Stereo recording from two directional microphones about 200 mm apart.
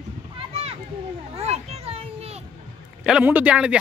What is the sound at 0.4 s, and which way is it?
Children playing, 30° right (ahead or behind).